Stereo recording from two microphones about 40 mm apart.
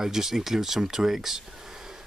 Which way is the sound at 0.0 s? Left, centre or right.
Centre.